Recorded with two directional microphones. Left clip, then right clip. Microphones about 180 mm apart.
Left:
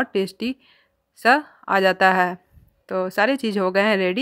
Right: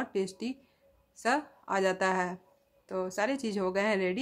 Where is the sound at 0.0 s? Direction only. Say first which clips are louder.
Left 10 dB; 35° left (ahead or behind).